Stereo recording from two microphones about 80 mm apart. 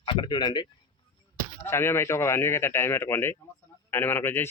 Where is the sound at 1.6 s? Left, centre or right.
Left.